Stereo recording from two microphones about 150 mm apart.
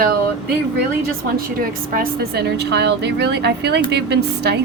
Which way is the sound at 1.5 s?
75° right (ahead or behind).